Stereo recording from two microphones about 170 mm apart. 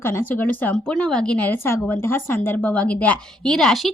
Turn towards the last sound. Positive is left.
turn(degrees=0)  # may be behind; listen again after turning